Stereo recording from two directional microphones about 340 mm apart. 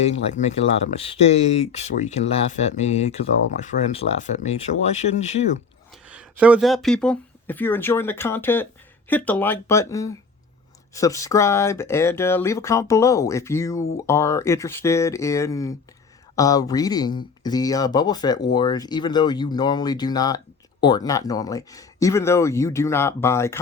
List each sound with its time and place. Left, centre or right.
0.0 s speech: centre
6.1 s speech: centre